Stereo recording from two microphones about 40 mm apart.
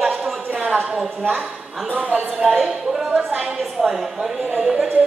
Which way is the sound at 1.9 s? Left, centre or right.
Right.